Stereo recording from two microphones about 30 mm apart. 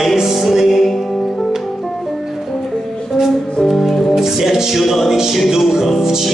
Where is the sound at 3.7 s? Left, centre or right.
Centre.